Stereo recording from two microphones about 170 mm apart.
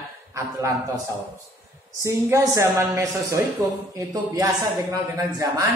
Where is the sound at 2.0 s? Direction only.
20° right (ahead or behind).